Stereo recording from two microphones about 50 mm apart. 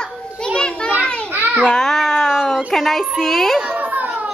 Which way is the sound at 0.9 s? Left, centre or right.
Right.